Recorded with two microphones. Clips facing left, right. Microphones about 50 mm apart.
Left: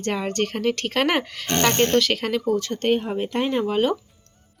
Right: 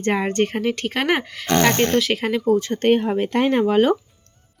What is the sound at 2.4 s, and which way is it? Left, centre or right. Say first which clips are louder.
Speech: right 7 dB; right.